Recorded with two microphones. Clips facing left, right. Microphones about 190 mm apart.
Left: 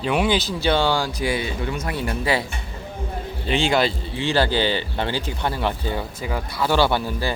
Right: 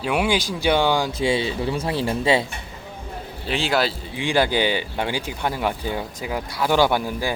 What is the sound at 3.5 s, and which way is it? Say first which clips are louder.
Speech: left 2 dB; 5° right (ahead or behind).